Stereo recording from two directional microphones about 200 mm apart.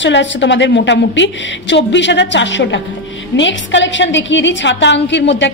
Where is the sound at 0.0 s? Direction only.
65° left (ahead or behind).